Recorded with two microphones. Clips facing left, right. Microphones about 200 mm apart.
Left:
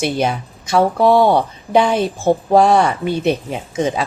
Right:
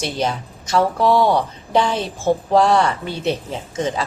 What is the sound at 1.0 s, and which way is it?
Speech, 50° left (ahead or behind).